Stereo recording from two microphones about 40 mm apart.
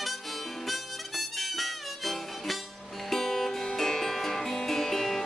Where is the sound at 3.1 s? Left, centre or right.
Centre.